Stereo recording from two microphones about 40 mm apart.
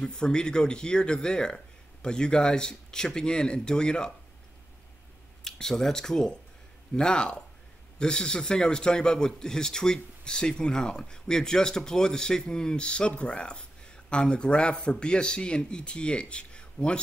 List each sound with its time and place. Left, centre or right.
0.0 s speech: left
5.4 s speech: centre